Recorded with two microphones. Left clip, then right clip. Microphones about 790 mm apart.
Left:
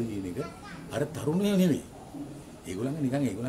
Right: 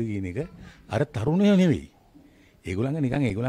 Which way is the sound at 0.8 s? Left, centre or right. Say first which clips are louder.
Right 4 dB; right.